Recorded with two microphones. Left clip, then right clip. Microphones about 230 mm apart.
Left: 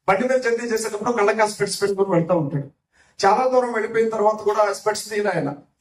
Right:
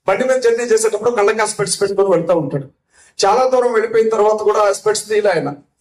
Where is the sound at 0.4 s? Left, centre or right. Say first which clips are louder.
Right 8 dB; right.